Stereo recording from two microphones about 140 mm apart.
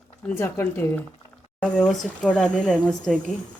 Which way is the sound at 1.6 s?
5° left (ahead or behind).